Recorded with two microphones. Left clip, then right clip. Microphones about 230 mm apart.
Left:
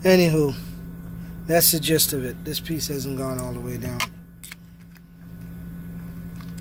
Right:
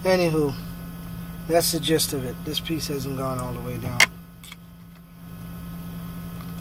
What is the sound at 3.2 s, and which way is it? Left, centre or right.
Speech, left.